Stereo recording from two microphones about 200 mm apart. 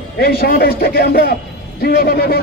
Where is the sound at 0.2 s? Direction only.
50° left (ahead or behind).